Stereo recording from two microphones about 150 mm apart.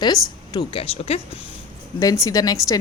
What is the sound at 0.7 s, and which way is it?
Speech, 40° left (ahead or behind).